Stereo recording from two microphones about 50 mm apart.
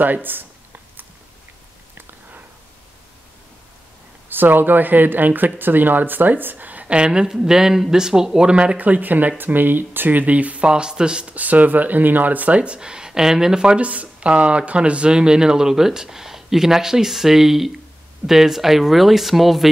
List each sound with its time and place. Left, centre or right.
0.0 s speech: right
4.3 s speech: right
7.0 s speech: centre
8.7 s speech: right; by 11.3 s centre
11.3 s speech: right; by 19.7 s centre